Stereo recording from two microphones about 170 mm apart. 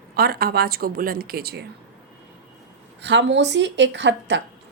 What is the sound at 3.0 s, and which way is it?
A woman's voice, 90° right.